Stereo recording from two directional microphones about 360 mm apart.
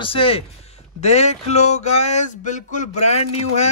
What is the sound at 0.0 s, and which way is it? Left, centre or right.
Speech, centre.